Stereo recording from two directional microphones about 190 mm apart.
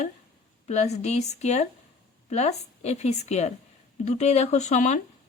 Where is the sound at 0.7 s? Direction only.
35° left (ahead or behind).